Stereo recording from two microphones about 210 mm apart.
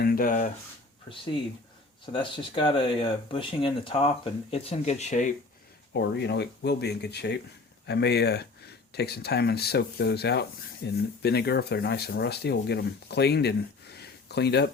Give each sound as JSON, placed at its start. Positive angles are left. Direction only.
{"t": 0.0, "sound": "speech", "side_deg": 45}
{"t": 1.1, "sound": "speech", "side_deg": 25}
{"t": 5.9, "sound": "speech", "side_deg": 55}